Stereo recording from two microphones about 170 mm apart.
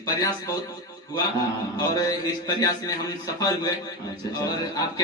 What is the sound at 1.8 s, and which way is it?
A man's voice, 20° left (ahead or behind).